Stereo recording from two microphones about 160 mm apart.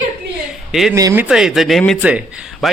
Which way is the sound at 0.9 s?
20° right (ahead or behind).